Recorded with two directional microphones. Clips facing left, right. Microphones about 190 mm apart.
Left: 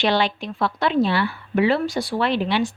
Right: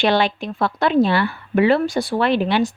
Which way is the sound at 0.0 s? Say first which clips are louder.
Right 3 dB; 50° right (ahead or behind).